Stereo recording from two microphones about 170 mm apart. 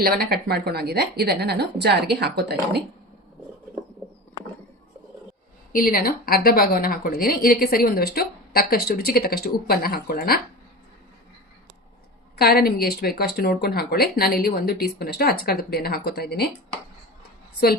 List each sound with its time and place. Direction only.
0.0 s a woman's voice: 65° right (ahead or behind)
5.7 s a woman's voice: 55° left (ahead or behind)
12.4 s a woman's voice: 65° left (ahead or behind)